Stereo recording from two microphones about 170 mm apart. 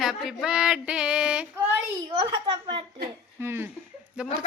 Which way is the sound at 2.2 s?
30° right (ahead or behind).